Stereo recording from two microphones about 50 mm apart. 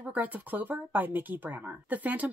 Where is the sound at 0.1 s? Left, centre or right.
Right.